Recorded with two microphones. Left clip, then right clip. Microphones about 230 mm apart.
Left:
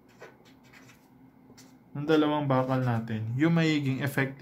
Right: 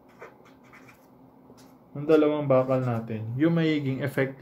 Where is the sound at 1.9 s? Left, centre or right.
Left.